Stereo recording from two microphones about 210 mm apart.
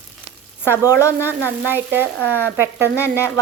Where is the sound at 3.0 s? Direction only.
10° left (ahead or behind).